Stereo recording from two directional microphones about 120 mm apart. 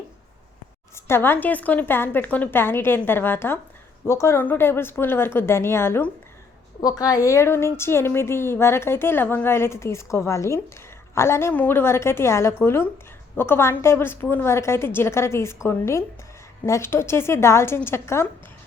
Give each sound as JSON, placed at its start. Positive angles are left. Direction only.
{"t": 0.9, "sound": "a woman's voice", "side_deg": 20}
{"t": 6.8, "sound": "a woman's voice", "side_deg": 30}